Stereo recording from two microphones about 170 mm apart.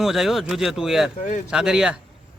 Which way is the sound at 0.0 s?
Centre (ahead or behind).